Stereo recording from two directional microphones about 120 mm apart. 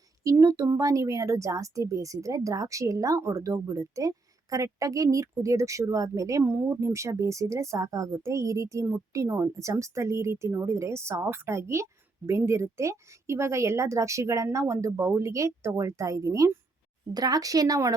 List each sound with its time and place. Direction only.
0.3 s a woman's voice: 25° right (ahead or behind)